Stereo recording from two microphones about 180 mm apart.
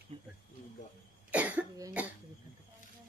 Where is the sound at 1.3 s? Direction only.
10° right (ahead or behind).